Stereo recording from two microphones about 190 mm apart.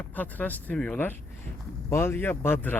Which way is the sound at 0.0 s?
10° left (ahead or behind).